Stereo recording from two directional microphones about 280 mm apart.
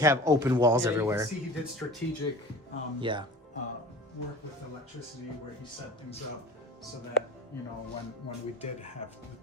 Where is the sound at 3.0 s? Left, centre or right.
Centre.